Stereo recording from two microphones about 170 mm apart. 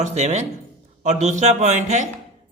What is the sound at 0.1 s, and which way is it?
A man's voice, 40° right (ahead or behind).